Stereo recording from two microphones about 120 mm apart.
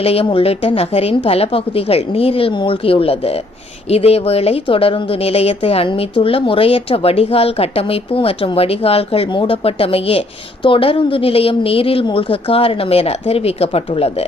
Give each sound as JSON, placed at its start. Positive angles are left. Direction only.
{"t": 0.0, "sound": "a woman's voice", "side_deg": 55}